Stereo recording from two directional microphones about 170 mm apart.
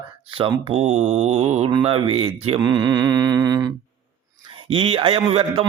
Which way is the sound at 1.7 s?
30° right (ahead or behind).